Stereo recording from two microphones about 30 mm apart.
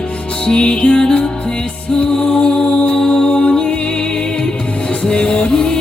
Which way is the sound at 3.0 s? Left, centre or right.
Left.